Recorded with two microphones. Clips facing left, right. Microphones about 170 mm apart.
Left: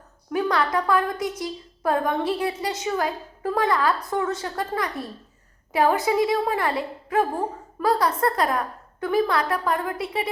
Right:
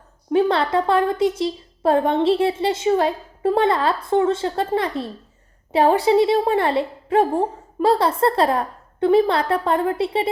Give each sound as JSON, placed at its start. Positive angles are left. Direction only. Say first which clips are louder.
{"t": 0.3, "sound": "a woman's voice", "louder": "right 5 dB", "side_deg": -25}